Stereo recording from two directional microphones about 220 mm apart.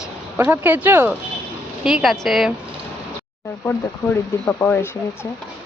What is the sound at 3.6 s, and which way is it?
Speech, 10° left (ahead or behind).